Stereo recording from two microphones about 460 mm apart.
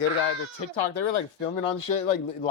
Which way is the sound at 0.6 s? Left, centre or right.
Left.